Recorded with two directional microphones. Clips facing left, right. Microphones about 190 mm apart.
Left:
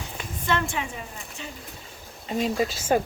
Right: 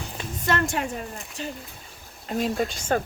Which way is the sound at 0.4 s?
40° right (ahead or behind).